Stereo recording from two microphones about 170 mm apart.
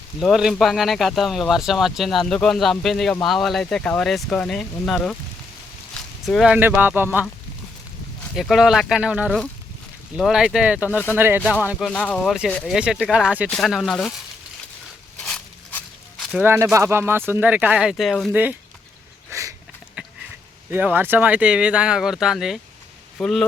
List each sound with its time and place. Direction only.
0.2 s speech: centre (ahead or behind)
6.2 s speech: centre (ahead or behind)
8.4 s speech: centre (ahead or behind)
11.9 s speech: 5° left (ahead or behind)
15.2 s a sound: 5° left (ahead or behind)
16.4 s speech: 15° right (ahead or behind); by 18.3 s centre (ahead or behind)
19.3 s sniff: 20° right (ahead or behind)
20.0 s a sound: 5° right (ahead or behind)
20.7 s speech: 10° right (ahead or behind)